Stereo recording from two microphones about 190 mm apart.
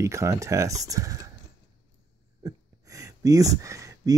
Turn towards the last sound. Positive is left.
turn(degrees=-15)  # may be behind; listen again after turning